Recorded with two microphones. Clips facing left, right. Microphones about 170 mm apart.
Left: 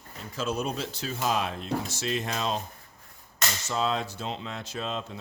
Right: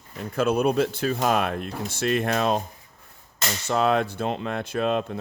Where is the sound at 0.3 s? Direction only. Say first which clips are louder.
Right 9 dB; 60° right (ahead or behind).